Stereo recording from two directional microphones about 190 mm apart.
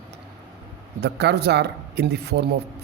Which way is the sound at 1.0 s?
60° right (ahead or behind).